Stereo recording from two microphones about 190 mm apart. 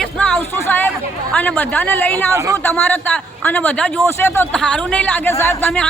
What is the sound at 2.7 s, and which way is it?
A man's voice, 5° left (ahead or behind).